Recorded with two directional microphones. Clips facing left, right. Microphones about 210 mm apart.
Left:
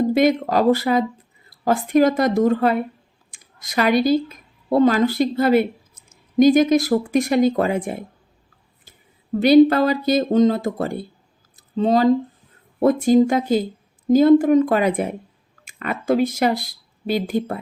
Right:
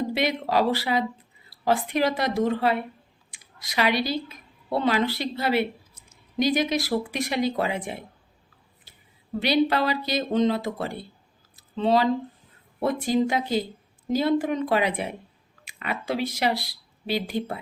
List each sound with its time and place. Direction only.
0.1 s speech: 45° left (ahead or behind)
1.5 s a sound: 50° left (ahead or behind)
1.9 s speech: 45° left (ahead or behind)
9.4 s speech: 50° left (ahead or behind)
11.5 s a sound: 45° left (ahead or behind)
12.8 s speech: 45° left (ahead or behind)